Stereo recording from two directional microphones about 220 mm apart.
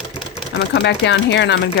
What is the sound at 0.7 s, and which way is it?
Speech, 50° left (ahead or behind).